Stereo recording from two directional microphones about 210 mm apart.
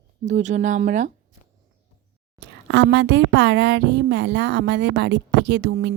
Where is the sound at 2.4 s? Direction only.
55° right (ahead or behind).